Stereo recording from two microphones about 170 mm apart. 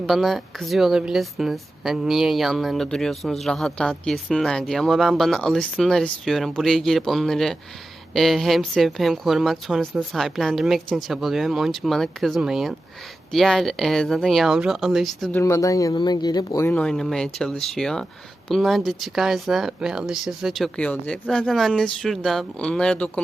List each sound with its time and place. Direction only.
0.0 s a woman's voice: centre (ahead or behind)
15.3 s speech: 15° left (ahead or behind)
16.7 s a woman's voice: centre (ahead or behind)